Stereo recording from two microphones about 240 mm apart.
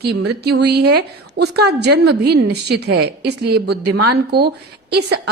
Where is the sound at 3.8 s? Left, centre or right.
Right.